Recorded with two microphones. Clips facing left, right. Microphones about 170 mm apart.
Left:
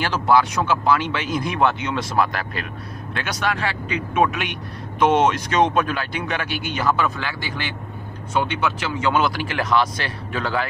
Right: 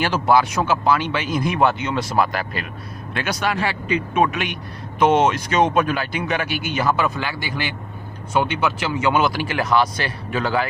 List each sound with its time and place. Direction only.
0.0 s a man's voice: 10° right (ahead or behind)